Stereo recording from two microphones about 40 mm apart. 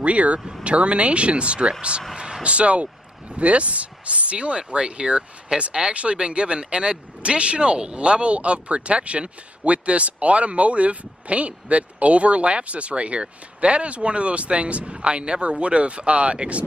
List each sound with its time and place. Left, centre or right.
0.0 s speech: right